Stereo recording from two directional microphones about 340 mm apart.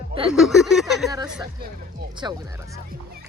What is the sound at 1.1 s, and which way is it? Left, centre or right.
Speech, centre.